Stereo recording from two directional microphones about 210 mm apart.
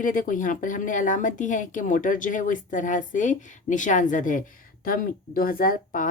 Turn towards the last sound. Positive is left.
turn(degrees=40)  # may be behind; listen again after turning